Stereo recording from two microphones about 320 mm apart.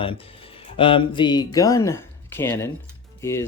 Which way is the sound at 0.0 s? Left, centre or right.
Centre.